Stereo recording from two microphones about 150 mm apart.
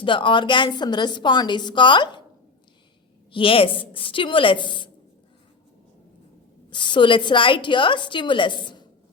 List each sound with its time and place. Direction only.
0.0 s a woman's voice: 35° left (ahead or behind)
3.3 s a woman's voice: 35° left (ahead or behind)
6.7 s a woman's voice: 30° left (ahead or behind)